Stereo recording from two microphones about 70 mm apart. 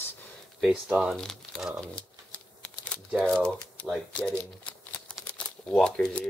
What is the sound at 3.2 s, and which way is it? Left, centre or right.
Speech, centre.